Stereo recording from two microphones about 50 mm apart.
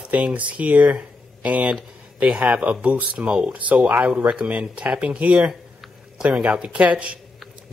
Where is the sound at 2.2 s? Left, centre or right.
Right.